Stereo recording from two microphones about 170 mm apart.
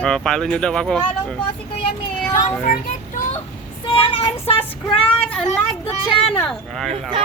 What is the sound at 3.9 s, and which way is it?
Child singing, 30° left (ahead or behind).